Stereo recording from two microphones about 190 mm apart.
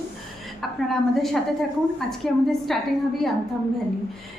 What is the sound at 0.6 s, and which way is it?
A woman's voice, centre (ahead or behind).